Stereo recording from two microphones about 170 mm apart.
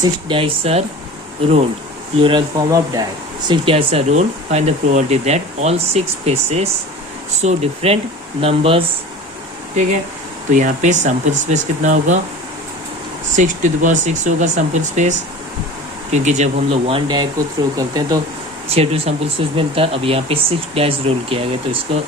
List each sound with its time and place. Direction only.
0.0 s speech: 30° right (ahead or behind)
2.1 s speech: 30° right (ahead or behind)
10.5 s speech: 45° right (ahead or behind)
13.3 s speech: 45° right (ahead or behind)
16.1 s speech: 45° right (ahead or behind); by 18.2 s 20° right (ahead or behind)
18.7 s speech: 35° right (ahead or behind)